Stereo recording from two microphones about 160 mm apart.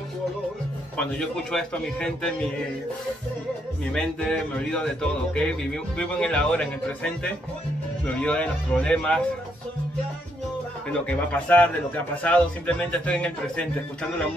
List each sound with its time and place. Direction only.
0.9 s a man's voice: 5° left (ahead or behind)
3.9 s a man's voice: 5° left (ahead or behind)
10.9 s a man's voice: 5° left (ahead or behind)